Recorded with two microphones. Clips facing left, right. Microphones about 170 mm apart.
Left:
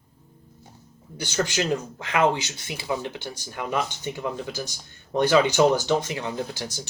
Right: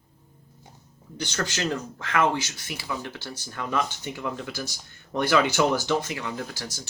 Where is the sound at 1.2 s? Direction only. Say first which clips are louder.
Left 3 dB; 15° left (ahead or behind).